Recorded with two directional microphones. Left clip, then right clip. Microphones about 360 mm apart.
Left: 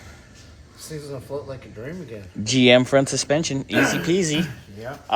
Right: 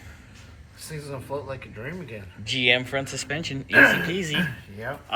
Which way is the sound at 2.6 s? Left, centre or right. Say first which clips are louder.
Left 6 dB; left.